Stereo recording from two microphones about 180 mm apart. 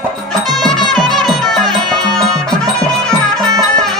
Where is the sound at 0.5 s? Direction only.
Centre (ahead or behind).